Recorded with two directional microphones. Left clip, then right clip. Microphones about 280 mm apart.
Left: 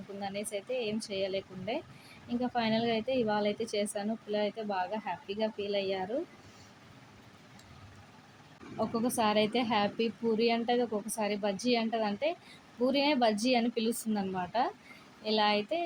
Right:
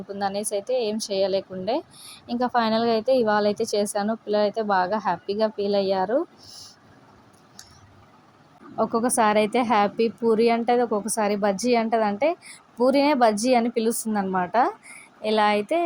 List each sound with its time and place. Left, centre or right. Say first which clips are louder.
0.2 s a woman's voice: right 11 dB; right
8.8 s a woman's voice: right 10 dB; right